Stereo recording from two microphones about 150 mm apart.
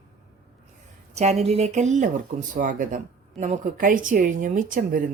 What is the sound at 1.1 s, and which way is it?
A woman's voice, 45° right (ahead or behind).